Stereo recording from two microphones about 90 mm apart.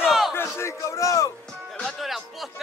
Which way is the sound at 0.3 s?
30° left (ahead or behind).